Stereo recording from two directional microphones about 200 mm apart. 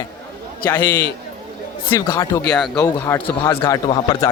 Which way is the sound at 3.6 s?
20° left (ahead or behind).